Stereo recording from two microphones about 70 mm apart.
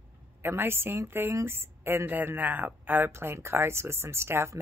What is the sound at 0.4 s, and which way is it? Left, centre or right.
A woman's voice, right.